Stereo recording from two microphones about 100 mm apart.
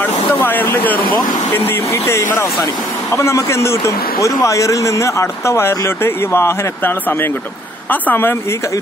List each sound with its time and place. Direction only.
0.0 s vehicle: 20° left (ahead or behind)
1.5 s speech: 25° left (ahead or behind)